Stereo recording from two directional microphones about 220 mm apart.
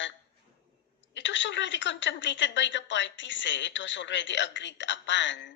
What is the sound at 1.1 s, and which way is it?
A woman's voice, 55° left (ahead or behind).